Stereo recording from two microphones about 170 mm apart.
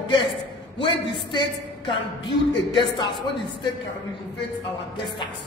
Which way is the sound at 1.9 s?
30° left (ahead or behind).